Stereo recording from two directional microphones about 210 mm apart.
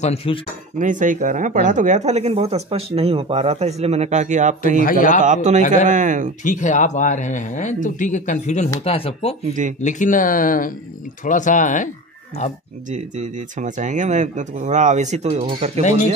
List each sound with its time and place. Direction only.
0.0 s speech: 30° left (ahead or behind)
0.7 s speech: 35° right (ahead or behind)
4.8 s speech: 40° left (ahead or behind)
5.2 s speech: 35° right (ahead or behind)
6.4 s speech: 35° left (ahead or behind)
9.5 s speech: 35° right (ahead or behind)
9.8 s speech: 35° left (ahead or behind)
12.9 s speech: 35° right (ahead or behind)